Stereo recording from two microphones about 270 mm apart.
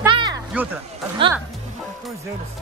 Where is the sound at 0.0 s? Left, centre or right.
Centre.